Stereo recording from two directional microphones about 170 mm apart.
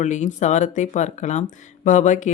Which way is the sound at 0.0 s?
45° left (ahead or behind).